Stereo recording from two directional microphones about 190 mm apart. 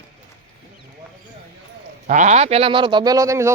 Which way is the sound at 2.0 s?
40° right (ahead or behind).